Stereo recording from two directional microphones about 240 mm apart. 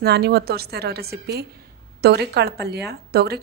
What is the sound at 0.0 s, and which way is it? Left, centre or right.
A woman's voice, right.